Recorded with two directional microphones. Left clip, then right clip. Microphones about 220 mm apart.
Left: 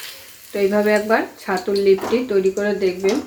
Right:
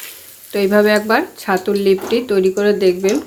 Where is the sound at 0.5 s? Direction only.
50° right (ahead or behind).